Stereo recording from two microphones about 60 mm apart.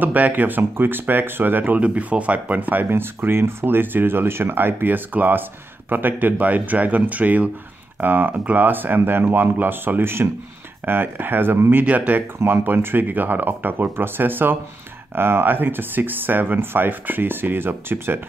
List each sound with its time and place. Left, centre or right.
0.0 s speech: right
11.8 s speech: right